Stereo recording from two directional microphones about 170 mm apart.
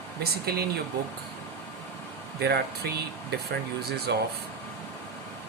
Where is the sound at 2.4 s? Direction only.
70° right (ahead or behind).